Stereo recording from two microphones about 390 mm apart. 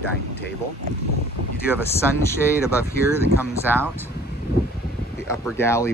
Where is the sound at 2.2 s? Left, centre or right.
Centre.